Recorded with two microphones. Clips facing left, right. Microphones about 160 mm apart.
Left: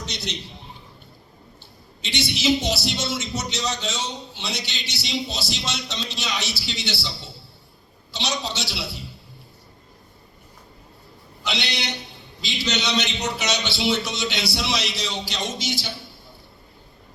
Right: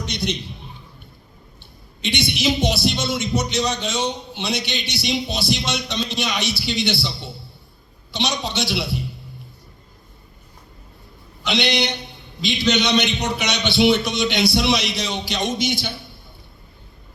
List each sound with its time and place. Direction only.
0.1 s a sound: 15° right (ahead or behind)
2.0 s music: 15° right (ahead or behind)
11.4 s music: 20° right (ahead or behind)